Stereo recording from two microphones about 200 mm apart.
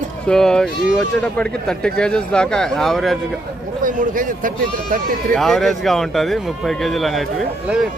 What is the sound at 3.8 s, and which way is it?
Speech, 40° right (ahead or behind).